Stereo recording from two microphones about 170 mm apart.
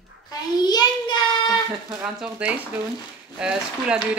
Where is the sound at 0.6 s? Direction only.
25° left (ahead or behind).